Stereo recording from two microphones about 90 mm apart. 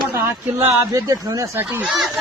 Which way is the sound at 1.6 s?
20° right (ahead or behind).